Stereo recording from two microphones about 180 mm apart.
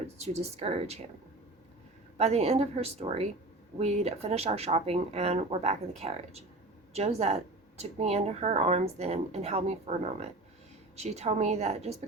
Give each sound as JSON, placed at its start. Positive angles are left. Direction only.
{"t": 0.2, "sound": "speech", "side_deg": -35}
{"t": 2.1, "sound": "speech", "side_deg": -35}